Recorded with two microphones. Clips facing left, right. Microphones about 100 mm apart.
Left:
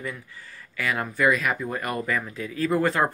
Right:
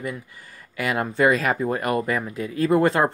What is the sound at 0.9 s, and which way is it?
Speech, 30° right (ahead or behind).